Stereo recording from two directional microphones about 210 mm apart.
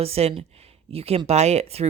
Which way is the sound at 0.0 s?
30° right (ahead or behind).